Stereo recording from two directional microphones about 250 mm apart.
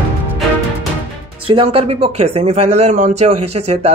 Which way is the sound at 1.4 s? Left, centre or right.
Right.